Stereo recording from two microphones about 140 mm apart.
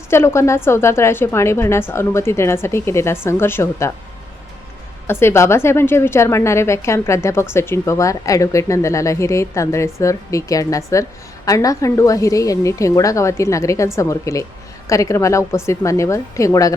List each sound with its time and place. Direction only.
0.1 s a woman's voice: 20° left (ahead or behind)
5.0 s a woman's voice: 15° left (ahead or behind)